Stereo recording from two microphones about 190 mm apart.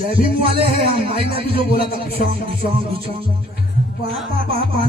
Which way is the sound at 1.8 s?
55° left (ahead or behind).